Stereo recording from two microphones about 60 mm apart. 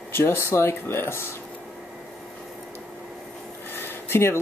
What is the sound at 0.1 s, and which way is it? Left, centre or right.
Speech, left.